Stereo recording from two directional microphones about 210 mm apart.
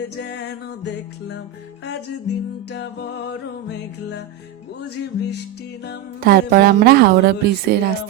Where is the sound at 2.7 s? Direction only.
55° left (ahead or behind).